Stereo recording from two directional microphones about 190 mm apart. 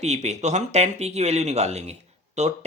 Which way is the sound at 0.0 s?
35° right (ahead or behind).